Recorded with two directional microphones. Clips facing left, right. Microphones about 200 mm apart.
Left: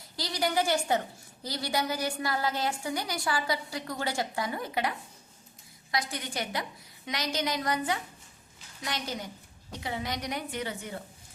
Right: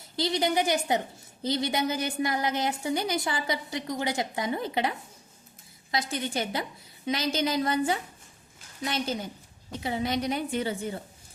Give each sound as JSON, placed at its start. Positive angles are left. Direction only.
{"t": 0.2, "sound": "a woman's voice", "side_deg": -20}